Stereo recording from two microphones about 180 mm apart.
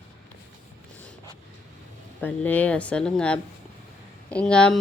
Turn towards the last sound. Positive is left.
turn(degrees=5)  # may be behind; listen again after turning